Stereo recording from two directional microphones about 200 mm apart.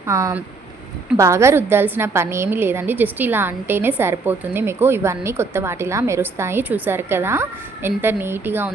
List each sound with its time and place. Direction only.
0.1 s a woman's voice: 15° right (ahead or behind)